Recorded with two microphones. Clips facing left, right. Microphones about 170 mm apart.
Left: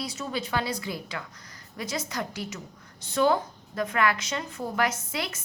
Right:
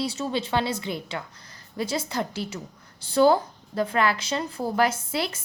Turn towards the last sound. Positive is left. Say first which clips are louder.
# right 5 dB
turn(degrees=-30)  # may be behind; listen again after turning